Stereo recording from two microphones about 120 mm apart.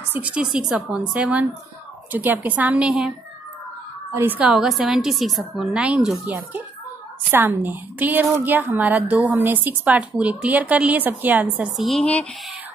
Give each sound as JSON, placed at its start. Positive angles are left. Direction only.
{"t": 0.1, "sound": "a woman's voice", "side_deg": -10}
{"t": 4.1, "sound": "a woman's voice", "side_deg": -15}
{"t": 4.5, "sound": "a woman's voice", "side_deg": -5}